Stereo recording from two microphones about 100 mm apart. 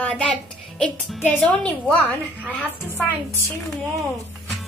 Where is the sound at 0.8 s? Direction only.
5° left (ahead or behind).